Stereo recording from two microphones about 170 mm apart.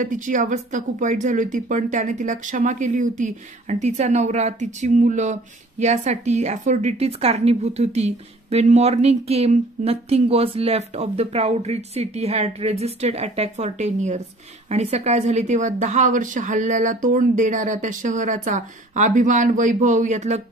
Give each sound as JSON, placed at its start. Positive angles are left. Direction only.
{"t": 0.0, "sound": "speech", "side_deg": -50}